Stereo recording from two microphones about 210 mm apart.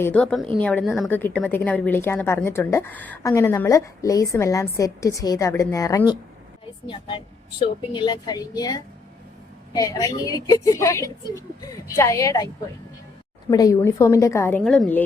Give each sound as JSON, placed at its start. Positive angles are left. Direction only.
{"t": 0.0, "sound": "a woman's voice", "side_deg": 5}
{"t": 7.9, "sound": "a woman's voice", "side_deg": 20}
{"t": 13.5, "sound": "a woman's voice", "side_deg": 15}